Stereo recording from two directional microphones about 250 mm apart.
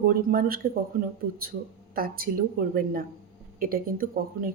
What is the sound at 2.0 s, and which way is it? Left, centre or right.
A woman's voice, right.